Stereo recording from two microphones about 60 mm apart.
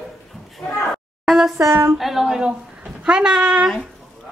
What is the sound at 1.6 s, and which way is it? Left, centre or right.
Speech, right.